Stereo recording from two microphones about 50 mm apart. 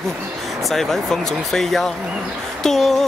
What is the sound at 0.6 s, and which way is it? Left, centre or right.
Speech, centre.